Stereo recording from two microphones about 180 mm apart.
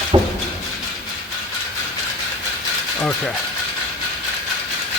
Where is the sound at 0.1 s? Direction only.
25° right (ahead or behind).